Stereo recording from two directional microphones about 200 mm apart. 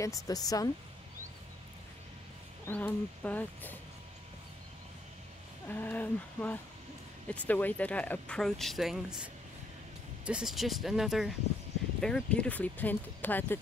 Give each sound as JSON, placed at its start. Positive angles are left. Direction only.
{"t": 0.0, "sound": "speech", "side_deg": 15}
{"t": 2.6, "sound": "speech", "side_deg": 10}
{"t": 5.7, "sound": "speech", "side_deg": 10}